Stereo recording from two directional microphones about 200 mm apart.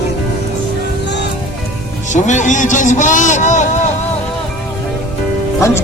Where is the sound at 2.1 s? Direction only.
35° left (ahead or behind).